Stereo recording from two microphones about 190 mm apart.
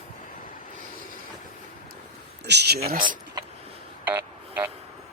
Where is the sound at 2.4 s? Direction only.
60° right (ahead or behind).